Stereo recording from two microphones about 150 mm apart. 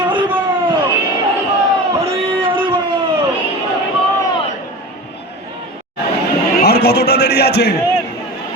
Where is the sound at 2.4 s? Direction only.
35° right (ahead or behind).